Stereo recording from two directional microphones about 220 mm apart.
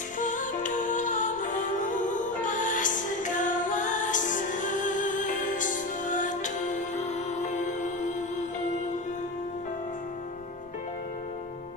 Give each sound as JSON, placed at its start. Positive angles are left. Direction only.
{"t": 0.2, "sound": "music", "side_deg": 35}